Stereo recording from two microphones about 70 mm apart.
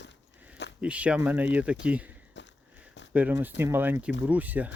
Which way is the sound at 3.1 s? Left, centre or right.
Right.